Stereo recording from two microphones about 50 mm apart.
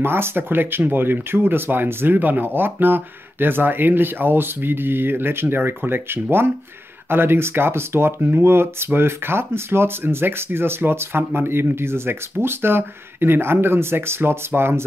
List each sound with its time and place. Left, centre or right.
0.0 s speech: right